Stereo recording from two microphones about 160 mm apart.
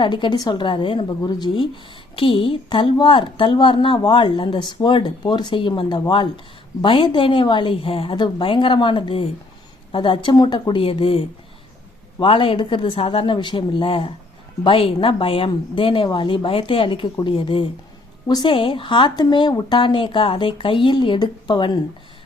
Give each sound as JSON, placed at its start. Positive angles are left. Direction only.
{"t": 0.0, "sound": "a woman's voice", "side_deg": 30}